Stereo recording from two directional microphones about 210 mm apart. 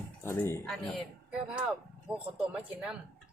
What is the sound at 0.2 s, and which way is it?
Speech, 10° left (ahead or behind).